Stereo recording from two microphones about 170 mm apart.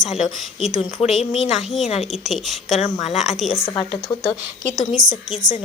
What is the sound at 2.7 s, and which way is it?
Speech, 40° left (ahead or behind).